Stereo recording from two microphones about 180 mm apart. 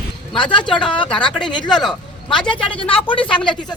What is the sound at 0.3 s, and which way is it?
Speech, 25° left (ahead or behind).